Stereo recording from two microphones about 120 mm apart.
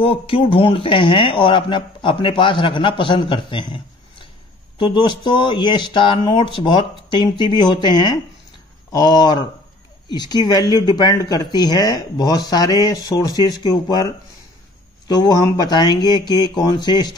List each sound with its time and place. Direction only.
0.0 s speech: 50° left (ahead or behind); by 14.0 s 35° left (ahead or behind)
15.0 s speech: 35° left (ahead or behind)